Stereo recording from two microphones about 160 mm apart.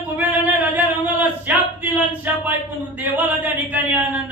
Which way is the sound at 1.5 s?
10° right (ahead or behind).